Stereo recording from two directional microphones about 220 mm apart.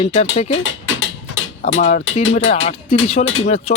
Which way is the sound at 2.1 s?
30° left (ahead or behind).